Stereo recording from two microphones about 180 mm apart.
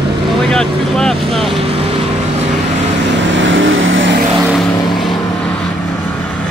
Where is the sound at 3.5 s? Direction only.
90° right.